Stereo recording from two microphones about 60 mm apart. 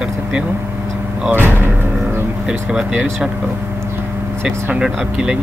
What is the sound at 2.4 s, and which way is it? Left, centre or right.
Speech, centre.